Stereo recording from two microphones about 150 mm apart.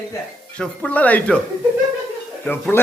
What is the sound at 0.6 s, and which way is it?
Speech, 5° left (ahead or behind).